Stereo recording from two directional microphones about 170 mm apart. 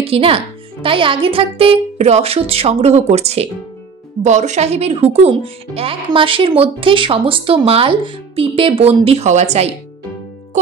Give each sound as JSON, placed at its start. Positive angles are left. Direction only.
{"t": 0.0, "sound": "speech", "side_deg": -35}